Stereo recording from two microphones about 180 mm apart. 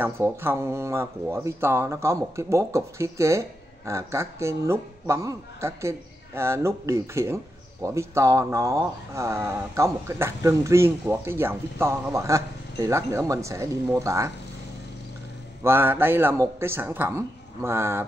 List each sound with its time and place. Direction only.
0.0 s speech: 10° right (ahead or behind)
15.6 s speech: 10° right (ahead or behind)